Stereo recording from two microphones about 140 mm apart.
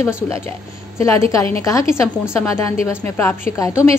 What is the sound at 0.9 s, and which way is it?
A woman's voice, 20° left (ahead or behind).